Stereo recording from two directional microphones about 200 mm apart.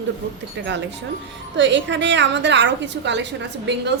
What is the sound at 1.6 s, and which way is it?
A woman's voice, 65° right (ahead or behind).